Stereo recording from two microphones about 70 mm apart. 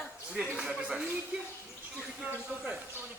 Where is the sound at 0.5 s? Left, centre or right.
Centre.